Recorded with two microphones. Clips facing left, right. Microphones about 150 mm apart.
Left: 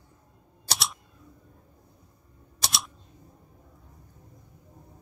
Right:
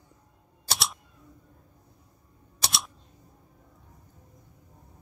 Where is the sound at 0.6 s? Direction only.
Centre (ahead or behind).